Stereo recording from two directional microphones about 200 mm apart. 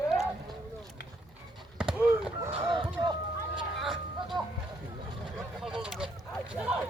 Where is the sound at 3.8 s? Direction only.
Centre (ahead or behind).